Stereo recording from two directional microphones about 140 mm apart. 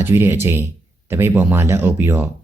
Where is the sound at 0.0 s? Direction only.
15° right (ahead or behind).